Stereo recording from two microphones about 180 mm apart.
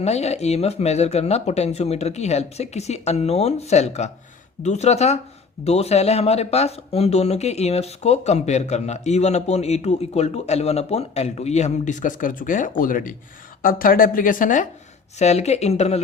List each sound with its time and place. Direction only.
0.0 s speech: 35° left (ahead or behind)